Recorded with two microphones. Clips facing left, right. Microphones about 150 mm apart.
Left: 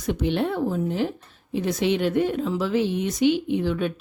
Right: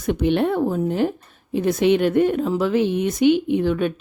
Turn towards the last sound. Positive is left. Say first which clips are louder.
# right 4 dB
turn(degrees=-55)  # may be behind; listen again after turning